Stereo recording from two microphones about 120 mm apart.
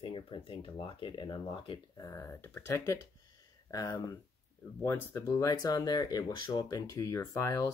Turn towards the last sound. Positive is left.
turn(degrees=25)  # may be behind; listen again after turning